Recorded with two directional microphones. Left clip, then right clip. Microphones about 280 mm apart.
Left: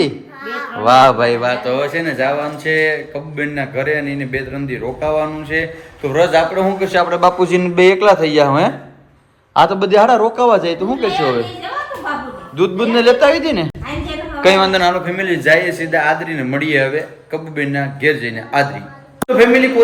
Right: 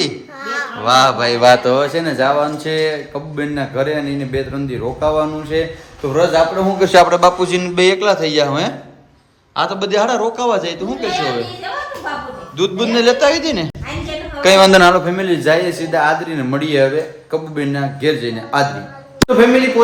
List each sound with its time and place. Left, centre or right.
0.8 s a man's voice: centre
1.4 s a man's voice: right
6.7 s speech: right
7.2 s a man's voice: centre
12.5 s a man's voice: centre
14.7 s speech: right
15.0 s a man's voice: centre